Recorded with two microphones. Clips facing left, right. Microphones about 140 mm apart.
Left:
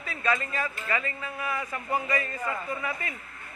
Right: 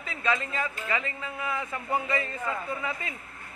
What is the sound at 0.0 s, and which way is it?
A man's voice, 20° right (ahead or behind).